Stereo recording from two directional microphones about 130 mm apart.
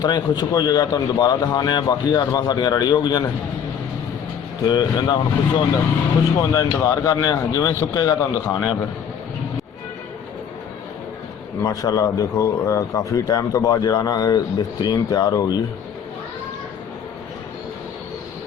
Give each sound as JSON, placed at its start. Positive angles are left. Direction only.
{"t": 0.0, "sound": "speech", "side_deg": 30}
{"t": 4.6, "sound": "a man's voice", "side_deg": 30}
{"t": 11.6, "sound": "a man's voice", "side_deg": 30}